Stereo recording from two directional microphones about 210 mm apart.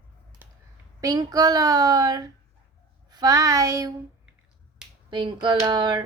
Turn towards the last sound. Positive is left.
turn(degrees=-20)  # may be behind; listen again after turning